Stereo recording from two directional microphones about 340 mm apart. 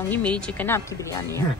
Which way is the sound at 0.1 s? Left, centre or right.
Centre.